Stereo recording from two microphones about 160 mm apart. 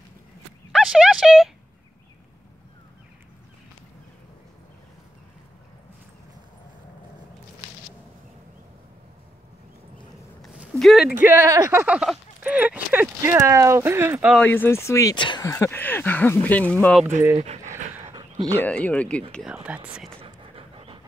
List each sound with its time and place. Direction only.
0.7 s a sound: centre (ahead or behind)
10.4 s a sound: centre (ahead or behind)
11.2 s speech: 15° right (ahead or behind)
14.4 s speech: 10° left (ahead or behind); by 15.4 s 30° left (ahead or behind)
15.4 s speech: 20° left (ahead or behind)
17.4 s dog: 45° right (ahead or behind)
18.6 s speech: 10° left (ahead or behind)
19.3 s speech: 5° right (ahead or behind)
20.5 s pant: 35° right (ahead or behind)